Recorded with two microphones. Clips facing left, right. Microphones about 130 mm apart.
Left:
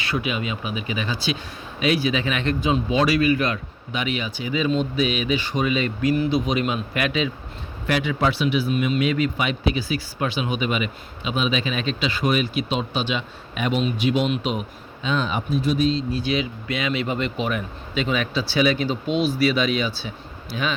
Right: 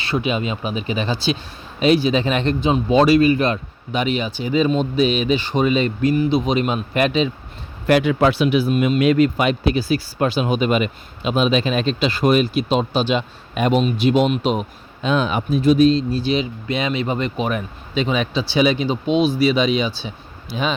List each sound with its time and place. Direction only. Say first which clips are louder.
0.0 s speech: right 4 dB; 25° right (ahead or behind)
7.9 s speech: right 7 dB; 50° right (ahead or behind)
15.0 s speech: right 5 dB; 55° right (ahead or behind); by 16.0 s 80° right
16.1 s speech: right 4 dB; 25° right (ahead or behind)